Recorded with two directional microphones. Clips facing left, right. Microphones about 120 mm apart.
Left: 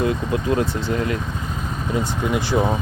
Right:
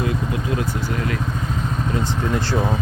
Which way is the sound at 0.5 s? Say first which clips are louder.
Left 3 dB; 25° left (ahead or behind).